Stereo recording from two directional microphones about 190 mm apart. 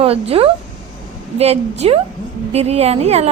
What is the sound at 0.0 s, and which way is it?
Speech, 30° right (ahead or behind).